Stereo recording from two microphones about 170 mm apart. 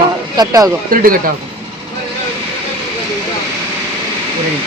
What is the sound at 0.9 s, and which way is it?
Speech, 55° right (ahead or behind).